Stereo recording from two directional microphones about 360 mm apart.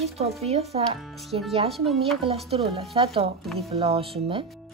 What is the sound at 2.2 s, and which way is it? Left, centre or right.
Speech, centre.